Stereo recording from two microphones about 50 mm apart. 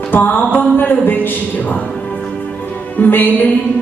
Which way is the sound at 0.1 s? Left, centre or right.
Left.